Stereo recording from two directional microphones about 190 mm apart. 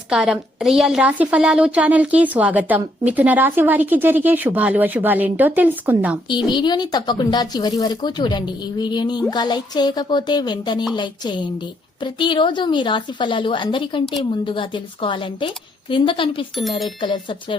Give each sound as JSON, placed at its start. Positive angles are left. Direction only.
{"t": 0.1, "sound": "a woman's voice", "side_deg": -5}
{"t": 6.2, "sound": "speech", "side_deg": 25}